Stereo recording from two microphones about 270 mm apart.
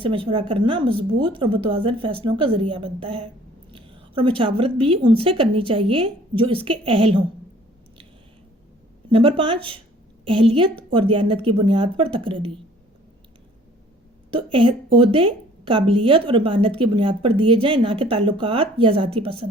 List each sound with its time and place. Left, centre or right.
0.0 s a woman's voice: centre
9.0 s a woman's voice: centre
14.3 s a woman's voice: centre